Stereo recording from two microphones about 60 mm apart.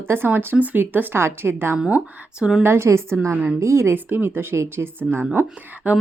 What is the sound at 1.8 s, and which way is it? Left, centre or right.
Speech, right.